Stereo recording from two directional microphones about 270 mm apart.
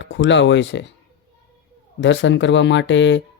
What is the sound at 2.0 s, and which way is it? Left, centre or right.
Speech, left.